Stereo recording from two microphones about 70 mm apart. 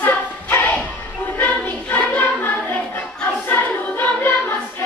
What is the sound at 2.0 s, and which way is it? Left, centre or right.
Choir, left.